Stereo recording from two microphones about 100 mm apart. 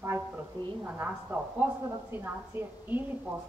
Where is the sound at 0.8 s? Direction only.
15° right (ahead or behind).